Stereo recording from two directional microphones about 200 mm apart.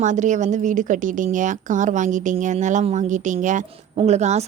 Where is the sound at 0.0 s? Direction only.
40° right (ahead or behind).